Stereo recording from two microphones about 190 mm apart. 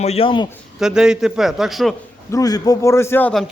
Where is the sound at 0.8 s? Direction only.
5° right (ahead or behind).